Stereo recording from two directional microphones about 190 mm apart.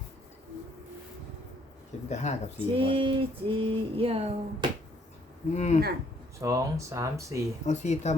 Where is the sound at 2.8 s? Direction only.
30° right (ahead or behind).